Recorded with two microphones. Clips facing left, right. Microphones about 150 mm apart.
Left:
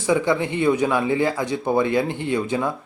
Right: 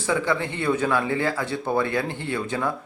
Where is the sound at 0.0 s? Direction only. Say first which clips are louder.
Left 4 dB; 15° left (ahead or behind).